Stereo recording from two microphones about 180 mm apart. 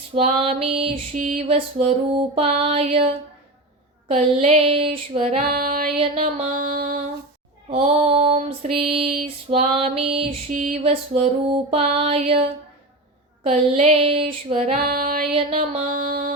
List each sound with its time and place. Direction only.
0.1 s child singing: 30° right (ahead or behind)
1.1 s child singing: 45° right (ahead or behind)
4.1 s child singing: 35° right (ahead or behind)
5.5 s music: 55° right (ahead or behind)
6.0 s music: 35° right (ahead or behind)
7.7 s child singing: 35° right (ahead or behind)
10.5 s music: 45° right (ahead or behind)
10.8 s child singing: 35° right (ahead or behind)
14.8 s music: 55° right (ahead or behind)
15.3 s music: 35° right (ahead or behind)